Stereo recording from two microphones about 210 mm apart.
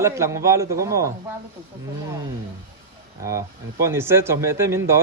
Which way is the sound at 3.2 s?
15° right (ahead or behind).